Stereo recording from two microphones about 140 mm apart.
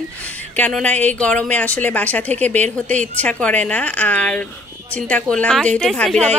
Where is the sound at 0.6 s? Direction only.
10° left (ahead or behind).